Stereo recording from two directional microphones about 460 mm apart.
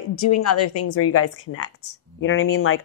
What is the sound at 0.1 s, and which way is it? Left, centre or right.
Speech, left.